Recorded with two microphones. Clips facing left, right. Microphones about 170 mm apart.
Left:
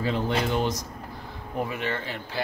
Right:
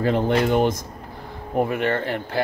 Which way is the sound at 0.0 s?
55° right (ahead or behind).